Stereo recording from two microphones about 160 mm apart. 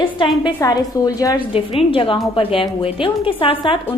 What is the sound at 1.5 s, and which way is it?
Speech, 35° left (ahead or behind).